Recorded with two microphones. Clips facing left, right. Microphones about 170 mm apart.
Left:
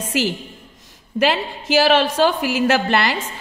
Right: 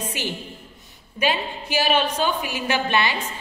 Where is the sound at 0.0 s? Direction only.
90° left.